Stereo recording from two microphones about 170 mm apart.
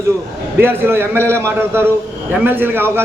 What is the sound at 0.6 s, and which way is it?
A man's voice, 15° right (ahead or behind).